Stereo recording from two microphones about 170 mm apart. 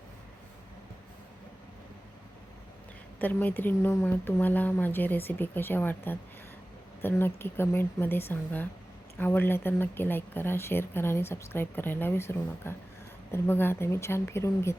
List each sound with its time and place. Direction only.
3.2 s speech: 10° left (ahead or behind)